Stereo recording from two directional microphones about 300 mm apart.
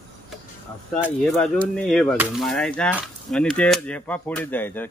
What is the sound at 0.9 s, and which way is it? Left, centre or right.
Speech, centre.